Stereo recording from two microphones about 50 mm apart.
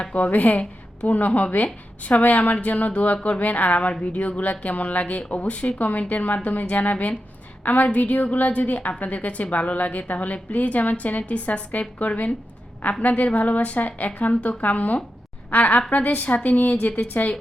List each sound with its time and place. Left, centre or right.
0.0 s a woman's voice: left